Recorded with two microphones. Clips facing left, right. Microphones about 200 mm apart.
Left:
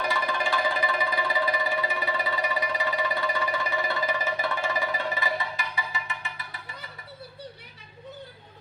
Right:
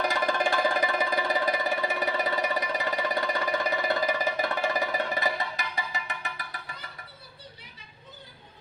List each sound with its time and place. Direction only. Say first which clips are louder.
0.1 s music: right 2 dB; 45° right (ahead or behind)